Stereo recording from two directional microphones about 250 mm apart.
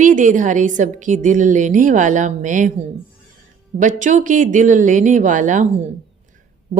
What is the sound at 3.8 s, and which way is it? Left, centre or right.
Speech, right.